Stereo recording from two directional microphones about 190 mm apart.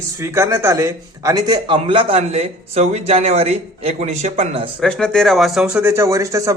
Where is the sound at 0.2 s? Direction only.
15° right (ahead or behind); by 4.7 s 30° right (ahead or behind).